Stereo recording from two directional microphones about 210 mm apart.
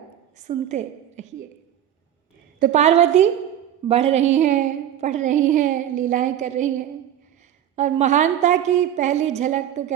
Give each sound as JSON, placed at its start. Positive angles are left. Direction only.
{"t": 0.3, "sound": "a woman's voice", "side_deg": -35}
{"t": 2.6, "sound": "a woman's voice", "side_deg": -35}
{"t": 7.8, "sound": "a woman's voice", "side_deg": -35}